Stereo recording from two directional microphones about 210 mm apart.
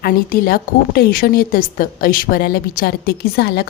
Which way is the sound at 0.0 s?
45° left (ahead or behind).